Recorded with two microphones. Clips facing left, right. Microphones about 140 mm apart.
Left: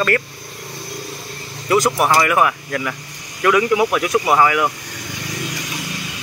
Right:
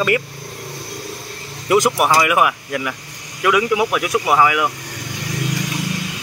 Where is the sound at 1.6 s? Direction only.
15° right (ahead or behind).